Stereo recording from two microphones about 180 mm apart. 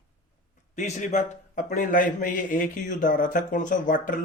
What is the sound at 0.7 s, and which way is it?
A man's voice, 45° left (ahead or behind).